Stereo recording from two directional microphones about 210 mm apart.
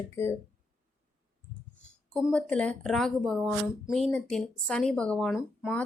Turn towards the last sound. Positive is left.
turn(degrees=0)  # may be behind; listen again after turning